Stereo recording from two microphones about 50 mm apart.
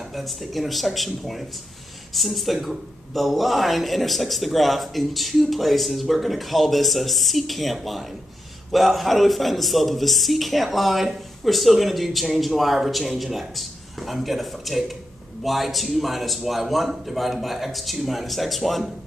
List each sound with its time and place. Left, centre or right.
0.1 s speech: centre